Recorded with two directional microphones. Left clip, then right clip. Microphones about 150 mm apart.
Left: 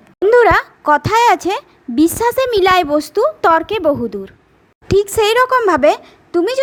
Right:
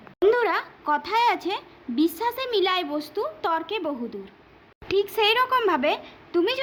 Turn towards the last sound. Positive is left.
turn(degrees=45)  # may be behind; listen again after turning